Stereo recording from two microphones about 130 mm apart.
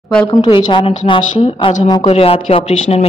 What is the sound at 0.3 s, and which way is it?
A woman's voice, 35° left (ahead or behind).